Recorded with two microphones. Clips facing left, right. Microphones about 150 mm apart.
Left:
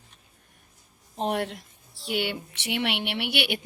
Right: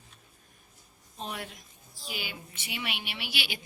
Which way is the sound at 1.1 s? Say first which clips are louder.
Left 11 dB; 70° left (ahead or behind).